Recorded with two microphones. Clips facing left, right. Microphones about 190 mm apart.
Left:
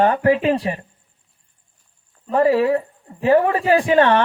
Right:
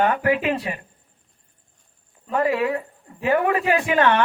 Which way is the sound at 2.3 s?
30° left (ahead or behind).